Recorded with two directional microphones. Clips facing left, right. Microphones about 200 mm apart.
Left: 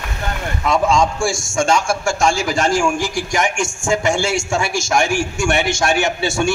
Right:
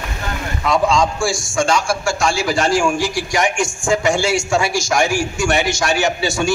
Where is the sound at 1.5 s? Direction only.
45° left (ahead or behind).